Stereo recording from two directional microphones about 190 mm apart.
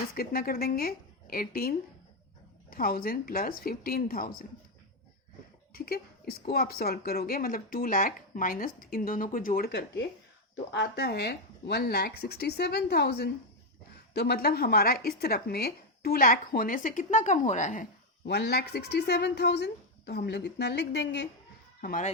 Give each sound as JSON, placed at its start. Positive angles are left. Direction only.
{"t": 0.1, "sound": "speech", "side_deg": 50}
{"t": 5.7, "sound": "speech", "side_deg": 55}
{"t": 18.3, "sound": "speech", "side_deg": 60}
{"t": 21.8, "sound": "speech", "side_deg": 45}